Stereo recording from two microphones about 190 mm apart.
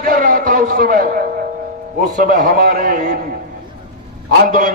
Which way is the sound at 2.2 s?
50° right (ahead or behind).